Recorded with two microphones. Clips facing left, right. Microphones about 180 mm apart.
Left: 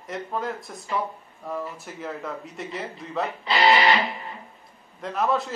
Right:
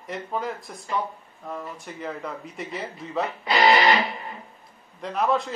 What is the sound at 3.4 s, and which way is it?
Music, 40° right (ahead or behind).